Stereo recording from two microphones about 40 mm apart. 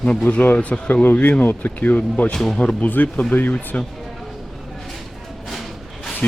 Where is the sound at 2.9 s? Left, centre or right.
Left.